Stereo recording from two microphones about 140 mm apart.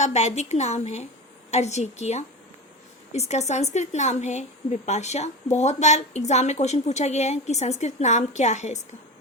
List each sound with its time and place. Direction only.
0.0 s a woman's voice: 55° left (ahead or behind)